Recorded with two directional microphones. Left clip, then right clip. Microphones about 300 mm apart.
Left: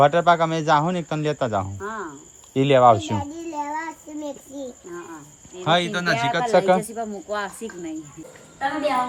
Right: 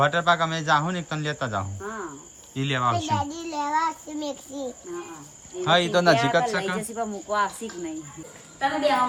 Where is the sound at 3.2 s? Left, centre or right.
Right.